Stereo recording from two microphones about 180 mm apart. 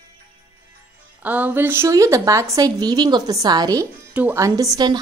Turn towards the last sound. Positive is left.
turn(degrees=-20)  # may be behind; listen again after turning